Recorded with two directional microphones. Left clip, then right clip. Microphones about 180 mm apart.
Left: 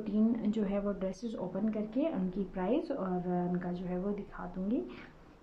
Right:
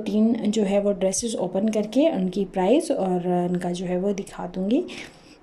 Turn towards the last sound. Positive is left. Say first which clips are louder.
# right 12 dB
turn(degrees=-25)  # may be behind; listen again after turning